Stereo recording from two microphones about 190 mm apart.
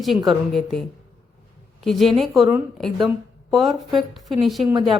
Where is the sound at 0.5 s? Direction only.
Centre (ahead or behind).